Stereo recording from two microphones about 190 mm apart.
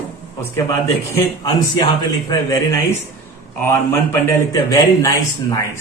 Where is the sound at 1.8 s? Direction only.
20° left (ahead or behind).